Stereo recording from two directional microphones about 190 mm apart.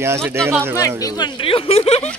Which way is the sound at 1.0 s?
20° left (ahead or behind).